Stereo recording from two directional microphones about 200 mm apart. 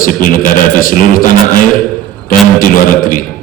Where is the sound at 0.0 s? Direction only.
45° left (ahead or behind).